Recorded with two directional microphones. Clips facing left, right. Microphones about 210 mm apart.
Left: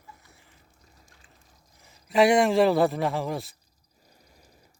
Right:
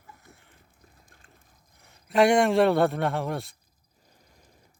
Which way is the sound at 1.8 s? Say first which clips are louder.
Left 1 dB; centre (ahead or behind).